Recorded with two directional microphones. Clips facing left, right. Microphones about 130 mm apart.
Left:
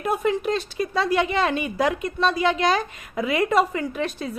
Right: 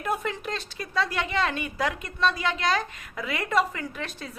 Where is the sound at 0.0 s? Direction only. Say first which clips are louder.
Left 7 dB; 10° left (ahead or behind).